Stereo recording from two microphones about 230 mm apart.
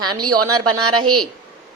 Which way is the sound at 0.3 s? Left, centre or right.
Right.